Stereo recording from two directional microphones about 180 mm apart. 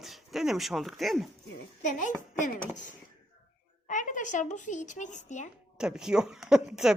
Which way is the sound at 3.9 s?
45° left (ahead or behind).